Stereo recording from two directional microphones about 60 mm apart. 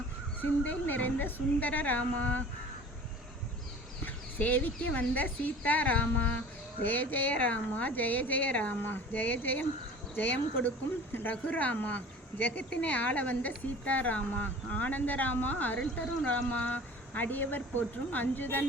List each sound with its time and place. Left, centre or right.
0.7 s speech: left
4.0 s speech: left